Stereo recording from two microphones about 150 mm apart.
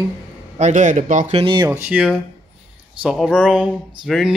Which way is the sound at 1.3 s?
35° right (ahead or behind).